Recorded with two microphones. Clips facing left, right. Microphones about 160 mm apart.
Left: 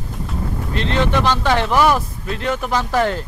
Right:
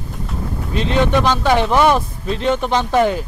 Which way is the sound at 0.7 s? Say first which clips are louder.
Right 3 dB; 15° right (ahead or behind).